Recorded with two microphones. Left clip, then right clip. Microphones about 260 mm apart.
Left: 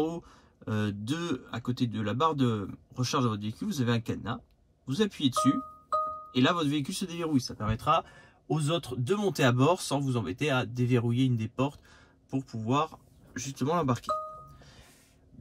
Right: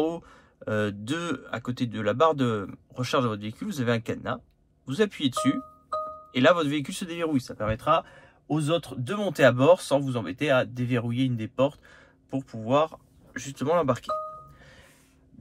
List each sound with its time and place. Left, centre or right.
0.7 s speech: centre